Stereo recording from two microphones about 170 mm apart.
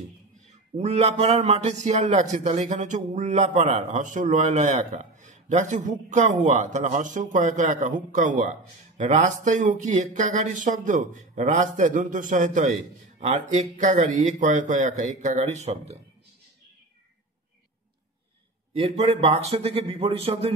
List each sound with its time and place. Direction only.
0.5 s a man's voice: 40° right (ahead or behind)
18.8 s speech: 40° right (ahead or behind)